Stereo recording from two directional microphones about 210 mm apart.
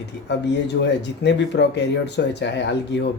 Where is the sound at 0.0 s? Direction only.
55° left (ahead or behind).